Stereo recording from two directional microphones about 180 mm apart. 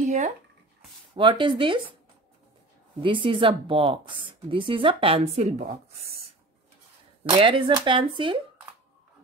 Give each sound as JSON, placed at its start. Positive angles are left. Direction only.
{"t": 1.1, "sound": "speech", "side_deg": -25}
{"t": 3.0, "sound": "a woman's voice", "side_deg": -30}
{"t": 7.2, "sound": "speech", "side_deg": -30}